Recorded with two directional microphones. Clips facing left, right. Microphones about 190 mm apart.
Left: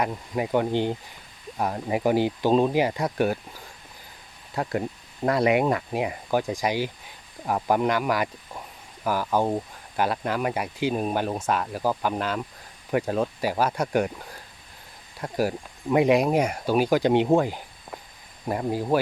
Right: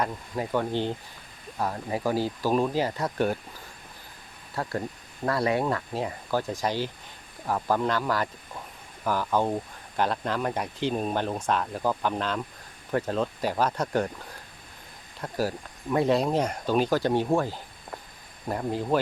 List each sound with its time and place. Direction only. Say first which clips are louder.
0.0 s speech: left 3 dB; 10° left (ahead or behind)
4.5 s speech: left 4 dB; 15° left (ahead or behind)
15.2 s speech: left 3 dB; 15° left (ahead or behind)